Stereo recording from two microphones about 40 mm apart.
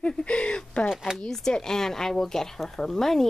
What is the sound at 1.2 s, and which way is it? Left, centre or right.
A woman's voice, centre.